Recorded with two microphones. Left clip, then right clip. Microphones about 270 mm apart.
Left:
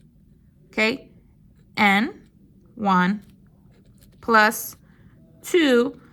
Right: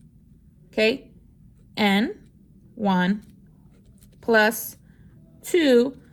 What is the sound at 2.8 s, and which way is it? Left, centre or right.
Speech, left.